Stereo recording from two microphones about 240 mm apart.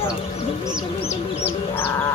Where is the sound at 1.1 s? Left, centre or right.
Left.